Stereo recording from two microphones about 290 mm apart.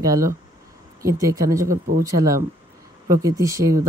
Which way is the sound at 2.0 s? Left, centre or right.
Centre.